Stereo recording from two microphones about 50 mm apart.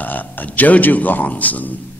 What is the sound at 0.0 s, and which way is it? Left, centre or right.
A man's voice, left.